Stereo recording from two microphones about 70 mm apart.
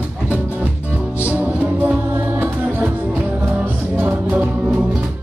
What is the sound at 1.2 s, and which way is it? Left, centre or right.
Music, right.